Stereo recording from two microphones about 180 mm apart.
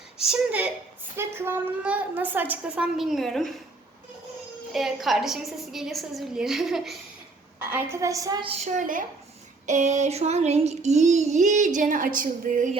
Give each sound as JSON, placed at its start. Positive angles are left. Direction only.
{"t": 0.3, "sound": "a woman's voice", "side_deg": -5}
{"t": 4.7, "sound": "a woman's voice", "side_deg": 0}
{"t": 9.6, "sound": "child singing", "side_deg": -40}